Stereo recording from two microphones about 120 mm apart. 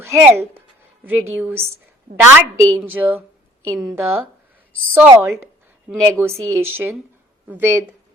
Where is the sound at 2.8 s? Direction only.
15° right (ahead or behind).